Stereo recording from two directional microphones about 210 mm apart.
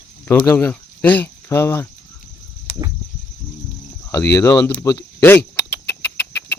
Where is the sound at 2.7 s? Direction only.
40° left (ahead or behind).